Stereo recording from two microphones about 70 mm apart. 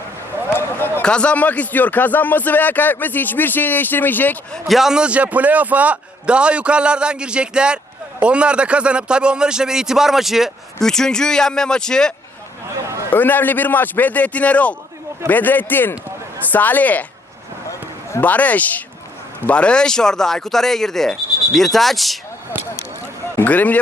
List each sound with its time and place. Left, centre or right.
0.5 s a sound: left
1.0 s speech: centre
4.7 s a man's voice: centre
10.8 s speech: centre
13.1 s speech: left
18.2 s speech: left; by 22.2 s centre
23.4 s speech: left